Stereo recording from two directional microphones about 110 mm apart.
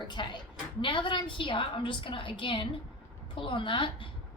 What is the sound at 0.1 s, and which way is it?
A woman's voice, 45° left (ahead or behind).